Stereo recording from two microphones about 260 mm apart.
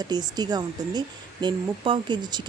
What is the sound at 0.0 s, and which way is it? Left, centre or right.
Speech, centre.